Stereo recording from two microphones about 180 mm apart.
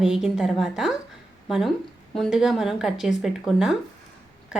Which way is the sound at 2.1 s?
Centre (ahead or behind).